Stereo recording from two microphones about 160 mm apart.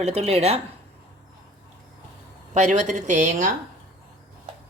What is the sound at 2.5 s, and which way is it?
Speech, 45° right (ahead or behind).